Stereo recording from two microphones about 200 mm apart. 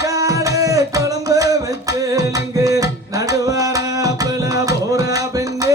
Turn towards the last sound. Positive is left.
turn(degrees=-15)  # may be behind; listen again after turning